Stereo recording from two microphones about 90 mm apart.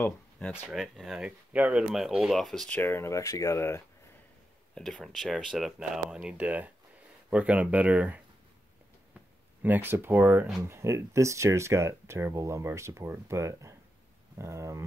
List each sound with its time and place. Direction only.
0.7 s speech: centre (ahead or behind)
2.7 s speech: 25° left (ahead or behind)
4.7 s speech: 5° left (ahead or behind); by 8.2 s 15° right (ahead or behind)
9.6 s speech: 20° right (ahead or behind)
10.6 s speech: 35° right (ahead or behind)